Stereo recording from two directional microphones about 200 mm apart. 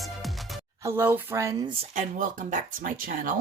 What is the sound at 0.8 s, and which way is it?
Speech, 15° right (ahead or behind).